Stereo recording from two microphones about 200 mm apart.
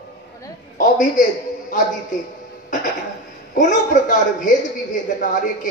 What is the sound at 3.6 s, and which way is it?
Speech, 40° left (ahead or behind).